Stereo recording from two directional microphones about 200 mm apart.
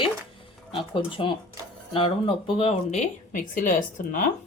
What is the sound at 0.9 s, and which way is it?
Speech, 25° left (ahead or behind).